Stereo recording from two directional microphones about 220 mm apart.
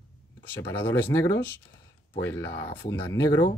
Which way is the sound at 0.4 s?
10° left (ahead or behind).